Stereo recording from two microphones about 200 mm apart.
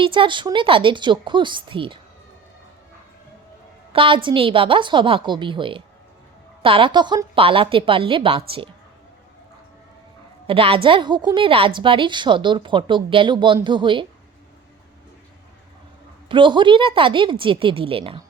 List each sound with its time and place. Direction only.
0.0 s a woman's voice: 25° right (ahead or behind)
3.9 s a woman's voice: 25° right (ahead or behind)
10.4 s a woman's voice: 25° right (ahead or behind)
16.3 s a woman's voice: 25° right (ahead or behind)